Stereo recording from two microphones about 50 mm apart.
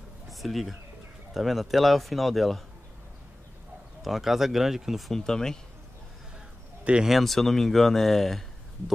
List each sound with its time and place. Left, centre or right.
0.3 s speech: centre
4.0 s speech: centre
5.2 s speech: centre
6.8 s a sound: right
7.1 s speech: centre